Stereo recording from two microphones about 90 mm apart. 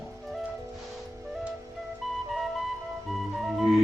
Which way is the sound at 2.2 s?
Centre (ahead or behind).